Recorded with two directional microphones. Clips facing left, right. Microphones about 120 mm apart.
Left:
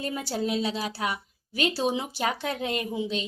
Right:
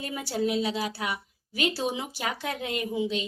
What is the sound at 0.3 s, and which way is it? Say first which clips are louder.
A woman's voice: right 2 dB; 30° left (ahead or behind).